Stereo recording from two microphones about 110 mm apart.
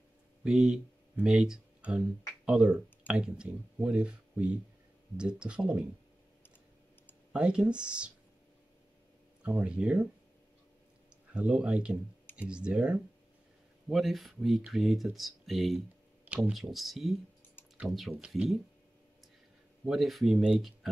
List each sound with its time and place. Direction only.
0.4 s speech: 5° right (ahead or behind)
7.3 s speech: 10° right (ahead or behind)
9.4 s speech: 10° right (ahead or behind)
11.3 s speech: 10° right (ahead or behind)
19.8 s speech: centre (ahead or behind)